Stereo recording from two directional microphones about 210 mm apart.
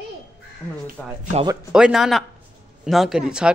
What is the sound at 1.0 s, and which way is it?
Speech, 5° left (ahead or behind).